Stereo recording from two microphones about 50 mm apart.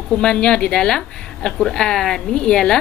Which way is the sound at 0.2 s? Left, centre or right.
Centre.